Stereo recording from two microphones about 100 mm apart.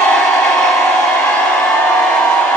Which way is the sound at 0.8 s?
10° left (ahead or behind).